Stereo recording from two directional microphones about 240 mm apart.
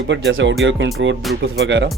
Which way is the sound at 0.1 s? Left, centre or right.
Right.